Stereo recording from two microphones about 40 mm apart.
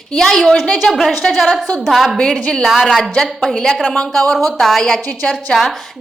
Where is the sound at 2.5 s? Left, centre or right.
Centre.